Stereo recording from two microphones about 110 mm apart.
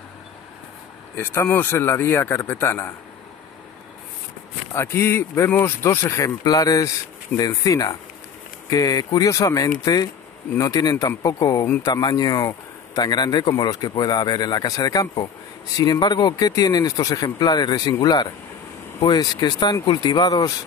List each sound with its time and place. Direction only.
1.1 s speech: 20° left (ahead or behind)
4.7 s speech: 25° left (ahead or behind)